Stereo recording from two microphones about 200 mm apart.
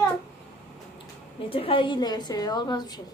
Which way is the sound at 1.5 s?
25° left (ahead or behind).